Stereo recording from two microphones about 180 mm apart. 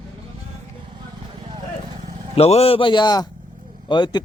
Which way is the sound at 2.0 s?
40° right (ahead or behind).